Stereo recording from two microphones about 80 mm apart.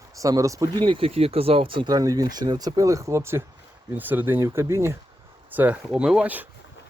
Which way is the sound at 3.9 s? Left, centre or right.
Right.